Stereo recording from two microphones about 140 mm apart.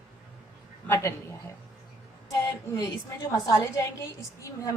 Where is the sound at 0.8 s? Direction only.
15° left (ahead or behind).